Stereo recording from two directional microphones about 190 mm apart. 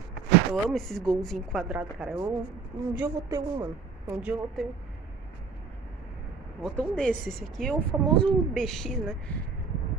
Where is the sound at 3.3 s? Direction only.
20° right (ahead or behind).